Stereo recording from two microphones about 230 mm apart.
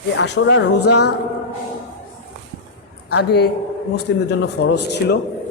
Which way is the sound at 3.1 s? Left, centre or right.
Left.